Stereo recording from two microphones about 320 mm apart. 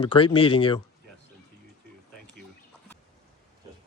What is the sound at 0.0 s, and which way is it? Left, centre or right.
Speech, centre.